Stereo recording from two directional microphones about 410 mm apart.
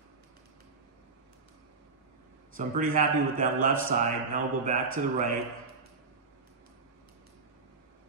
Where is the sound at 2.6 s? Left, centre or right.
Centre.